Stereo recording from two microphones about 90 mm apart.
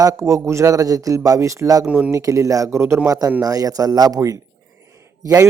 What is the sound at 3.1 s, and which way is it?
A man's voice, 40° right (ahead or behind).